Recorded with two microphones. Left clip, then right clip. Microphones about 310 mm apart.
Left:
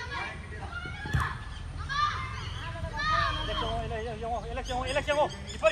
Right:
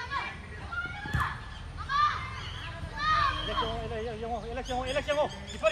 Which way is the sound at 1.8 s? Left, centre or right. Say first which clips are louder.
Right 2 dB; centre.